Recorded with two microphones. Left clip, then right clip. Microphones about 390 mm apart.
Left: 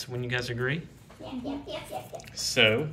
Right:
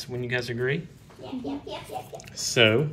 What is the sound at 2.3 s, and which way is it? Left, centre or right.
Speech, centre.